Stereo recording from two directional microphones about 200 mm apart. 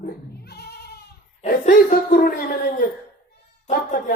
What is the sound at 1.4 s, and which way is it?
Speech, 40° left (ahead or behind).